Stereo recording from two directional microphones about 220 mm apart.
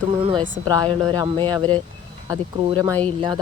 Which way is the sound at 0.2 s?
25° right (ahead or behind).